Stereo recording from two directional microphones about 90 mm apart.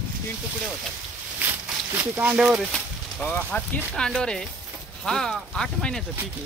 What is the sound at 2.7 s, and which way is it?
Speech, 15° left (ahead or behind).